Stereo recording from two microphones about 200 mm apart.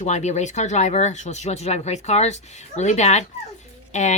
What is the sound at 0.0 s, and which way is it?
Speech, 35° left (ahead or behind).